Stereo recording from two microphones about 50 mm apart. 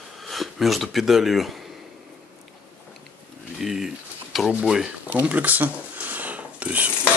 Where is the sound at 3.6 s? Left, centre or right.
Centre.